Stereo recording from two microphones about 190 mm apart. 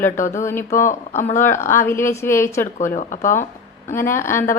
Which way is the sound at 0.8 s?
40° left (ahead or behind).